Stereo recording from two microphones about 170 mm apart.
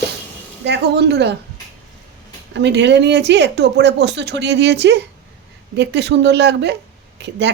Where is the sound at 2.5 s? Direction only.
90° right.